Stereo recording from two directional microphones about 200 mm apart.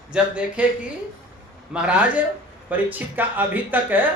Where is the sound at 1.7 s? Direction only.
5° right (ahead or behind).